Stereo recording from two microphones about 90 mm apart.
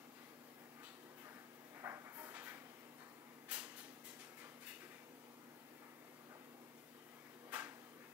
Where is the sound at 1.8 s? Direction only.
30° right (ahead or behind).